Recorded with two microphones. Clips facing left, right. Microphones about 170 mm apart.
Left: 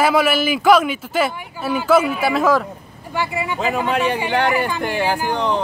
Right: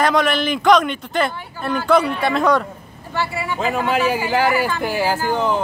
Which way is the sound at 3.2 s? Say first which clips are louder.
Left 1 dB; 15° left (ahead or behind).